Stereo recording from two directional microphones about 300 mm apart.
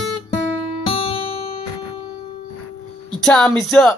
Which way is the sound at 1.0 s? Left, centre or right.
Centre.